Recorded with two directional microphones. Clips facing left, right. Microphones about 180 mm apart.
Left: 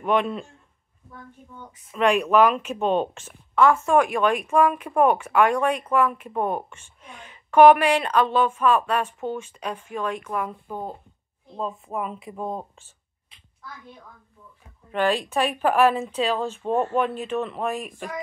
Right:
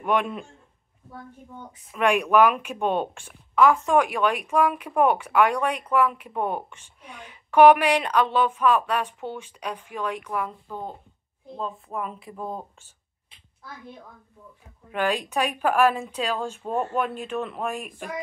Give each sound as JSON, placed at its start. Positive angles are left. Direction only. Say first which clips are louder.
{"t": 0.0, "sound": "a woman's voice", "louder": "left 2 dB", "side_deg": -10}
{"t": 2.0, "sound": "a woman's voice", "louder": "left 1 dB", "side_deg": -10}
{"t": 10.4, "sound": "speech", "louder": "left 2 dB", "side_deg": 10}
{"t": 14.9, "sound": "a woman's voice", "louder": "left 3 dB", "side_deg": -5}